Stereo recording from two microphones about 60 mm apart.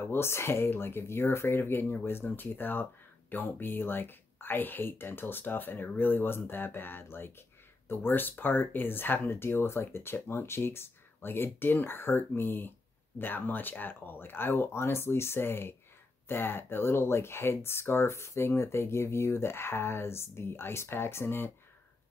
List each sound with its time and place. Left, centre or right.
0.0 s speech: left